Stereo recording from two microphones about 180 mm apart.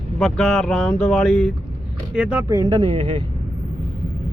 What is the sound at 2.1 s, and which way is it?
Speech, 10° right (ahead or behind).